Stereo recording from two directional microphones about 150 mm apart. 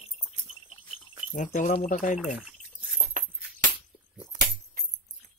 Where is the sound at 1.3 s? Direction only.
55° left (ahead or behind).